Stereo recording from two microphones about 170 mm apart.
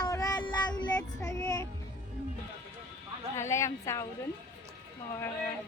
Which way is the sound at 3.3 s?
15° left (ahead or behind).